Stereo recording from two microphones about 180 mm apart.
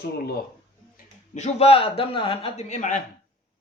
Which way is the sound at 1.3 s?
35° left (ahead or behind).